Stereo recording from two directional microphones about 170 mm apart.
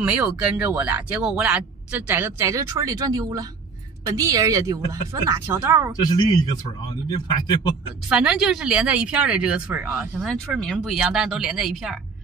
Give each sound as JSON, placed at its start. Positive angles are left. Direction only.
{"t": 0.0, "sound": "speech", "side_deg": -10}
{"t": 5.9, "sound": "speech", "side_deg": 25}
{"t": 8.1, "sound": "speech", "side_deg": -5}